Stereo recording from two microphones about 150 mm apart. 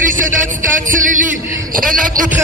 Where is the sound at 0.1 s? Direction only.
60° right (ahead or behind).